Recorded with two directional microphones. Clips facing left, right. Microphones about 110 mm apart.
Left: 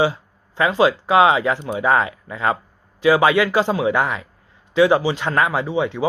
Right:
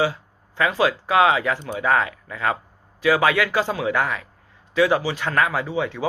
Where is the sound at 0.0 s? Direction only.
25° left (ahead or behind).